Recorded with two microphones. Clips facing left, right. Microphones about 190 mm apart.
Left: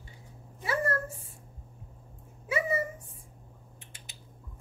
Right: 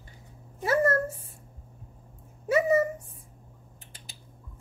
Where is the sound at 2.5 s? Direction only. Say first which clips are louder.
Right 8 dB; 40° right (ahead or behind).